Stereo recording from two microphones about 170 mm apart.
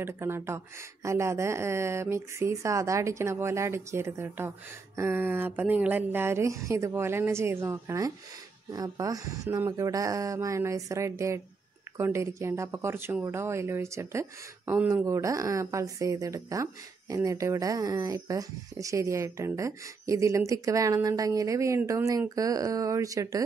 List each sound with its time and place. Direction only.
0.0 s speech: 15° right (ahead or behind)